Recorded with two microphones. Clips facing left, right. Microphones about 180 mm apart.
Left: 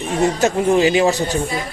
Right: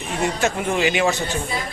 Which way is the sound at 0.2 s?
35° left (ahead or behind).